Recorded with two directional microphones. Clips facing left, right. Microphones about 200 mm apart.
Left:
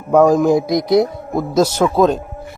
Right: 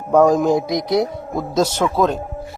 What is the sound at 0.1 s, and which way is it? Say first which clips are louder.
A man's voice: left 2 dB; 5° left (ahead or behind).